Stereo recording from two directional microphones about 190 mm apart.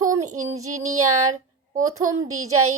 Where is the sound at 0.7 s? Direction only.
90° right.